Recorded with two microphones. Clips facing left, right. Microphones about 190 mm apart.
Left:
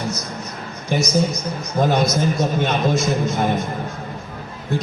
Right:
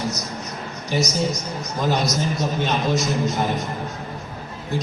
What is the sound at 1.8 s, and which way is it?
A man's voice, 55° left (ahead or behind).